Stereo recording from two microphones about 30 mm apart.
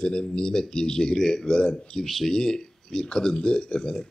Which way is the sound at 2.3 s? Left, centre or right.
Centre.